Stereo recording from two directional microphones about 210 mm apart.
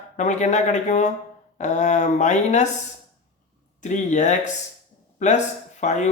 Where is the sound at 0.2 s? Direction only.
35° left (ahead or behind).